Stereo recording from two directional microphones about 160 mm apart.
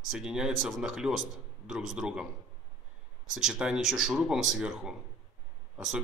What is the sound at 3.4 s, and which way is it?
Speech, 5° right (ahead or behind).